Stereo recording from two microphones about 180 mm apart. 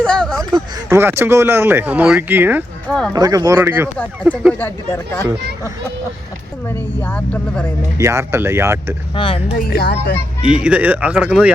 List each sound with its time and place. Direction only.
0.0 s a sound: 5° left (ahead or behind)
0.9 s speech: 15° right (ahead or behind)
2.8 s speech: 5° left (ahead or behind)
3.1 s speech: 20° right (ahead or behind)
4.6 s speech: 10° left (ahead or behind)
6.7 s speech: 10° left (ahead or behind)
7.9 s speech: 15° right (ahead or behind)
9.1 s speech: 30° left (ahead or behind)
9.6 s speech: 60° left (ahead or behind)
10.4 s speech: 5° right (ahead or behind)